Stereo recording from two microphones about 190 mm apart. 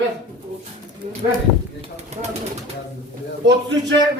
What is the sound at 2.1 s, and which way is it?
Speech, 35° right (ahead or behind).